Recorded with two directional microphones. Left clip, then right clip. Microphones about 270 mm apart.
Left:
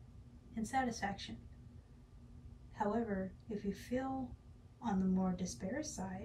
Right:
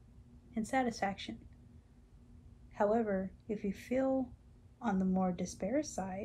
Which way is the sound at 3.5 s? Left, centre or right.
Centre.